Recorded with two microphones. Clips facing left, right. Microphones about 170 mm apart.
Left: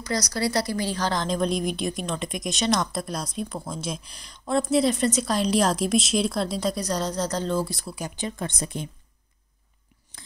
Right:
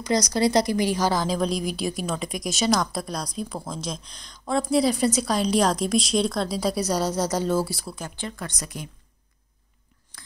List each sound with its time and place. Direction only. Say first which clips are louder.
0.0 s speech: right 5 dB; 20° right (ahead or behind); by 7.9 s 5° right (ahead or behind)
7.9 s speech: left 2 dB; 15° left (ahead or behind)